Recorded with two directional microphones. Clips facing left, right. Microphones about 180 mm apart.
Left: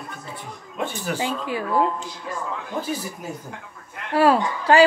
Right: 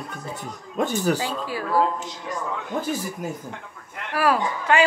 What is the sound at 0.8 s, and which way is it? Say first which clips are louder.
Speech: right 5 dB; 40° right (ahead or behind).